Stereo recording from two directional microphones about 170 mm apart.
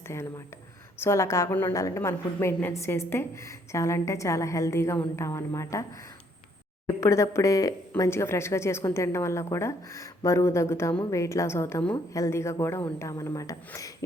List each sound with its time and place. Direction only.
0.1 s speech: 15° left (ahead or behind)
6.8 s speech: 15° left (ahead or behind)